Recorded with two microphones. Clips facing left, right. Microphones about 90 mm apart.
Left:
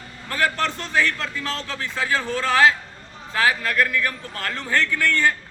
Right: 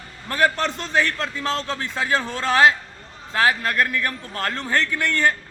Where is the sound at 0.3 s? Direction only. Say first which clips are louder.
Right 2 dB; 20° right (ahead or behind).